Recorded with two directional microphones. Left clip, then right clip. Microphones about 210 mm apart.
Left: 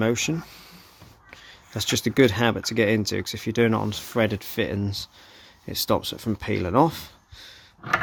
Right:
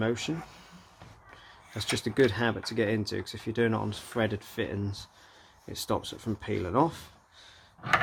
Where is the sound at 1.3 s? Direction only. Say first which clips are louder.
Left 7 dB; 45° left (ahead or behind).